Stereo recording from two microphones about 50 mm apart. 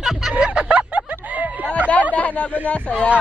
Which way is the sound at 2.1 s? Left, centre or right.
Left.